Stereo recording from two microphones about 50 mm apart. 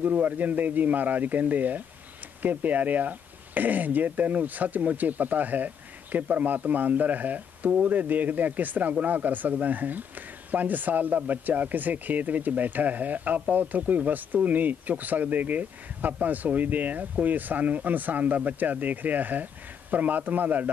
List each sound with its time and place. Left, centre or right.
0.0 s speech: right